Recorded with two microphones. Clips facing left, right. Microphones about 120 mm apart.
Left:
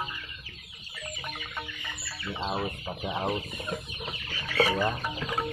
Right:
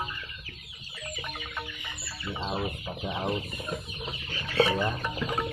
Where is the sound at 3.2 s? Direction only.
5° left (ahead or behind).